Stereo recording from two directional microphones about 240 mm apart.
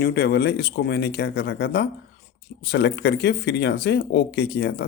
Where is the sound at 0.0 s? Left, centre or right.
Left.